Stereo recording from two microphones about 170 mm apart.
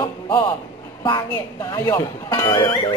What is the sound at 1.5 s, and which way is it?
Speech, 15° left (ahead or behind).